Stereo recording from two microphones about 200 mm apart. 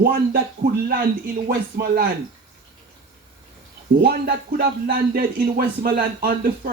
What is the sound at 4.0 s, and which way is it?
Speech, 50° right (ahead or behind).